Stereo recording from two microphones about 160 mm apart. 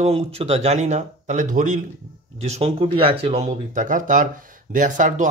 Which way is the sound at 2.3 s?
40° right (ahead or behind).